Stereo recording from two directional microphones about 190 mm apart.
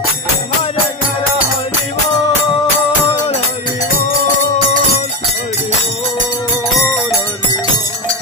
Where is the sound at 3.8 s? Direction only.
40° left (ahead or behind).